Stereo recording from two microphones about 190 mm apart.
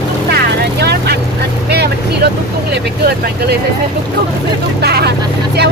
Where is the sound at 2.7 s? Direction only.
60° right (ahead or behind).